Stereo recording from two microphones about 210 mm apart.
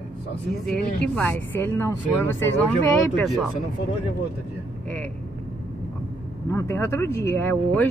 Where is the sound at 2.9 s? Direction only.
5° left (ahead or behind).